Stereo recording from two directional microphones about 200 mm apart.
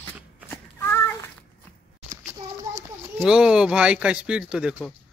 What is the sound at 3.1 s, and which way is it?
Speech, 5° right (ahead or behind).